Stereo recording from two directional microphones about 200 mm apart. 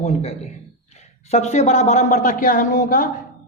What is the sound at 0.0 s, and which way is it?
A man's voice, 30° left (ahead or behind).